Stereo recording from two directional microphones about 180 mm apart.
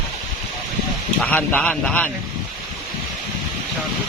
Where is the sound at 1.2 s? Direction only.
10° left (ahead or behind).